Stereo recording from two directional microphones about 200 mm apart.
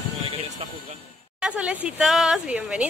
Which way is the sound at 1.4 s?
5° right (ahead or behind).